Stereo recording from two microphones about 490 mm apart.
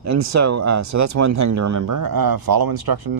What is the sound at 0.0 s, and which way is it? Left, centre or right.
Speech, right.